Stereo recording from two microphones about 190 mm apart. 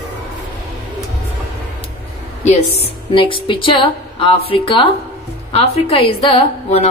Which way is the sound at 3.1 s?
25° left (ahead or behind).